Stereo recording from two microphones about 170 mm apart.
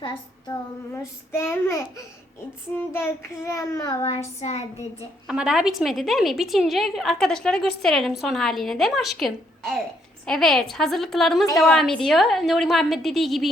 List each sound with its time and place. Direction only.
0.0 s a child's voice: 25° left (ahead or behind)
1.3 s a child's voice: 15° left (ahead or behind)
4.0 s a sound: 40° left (ahead or behind)
5.3 s a woman's voice: 5° right (ahead or behind)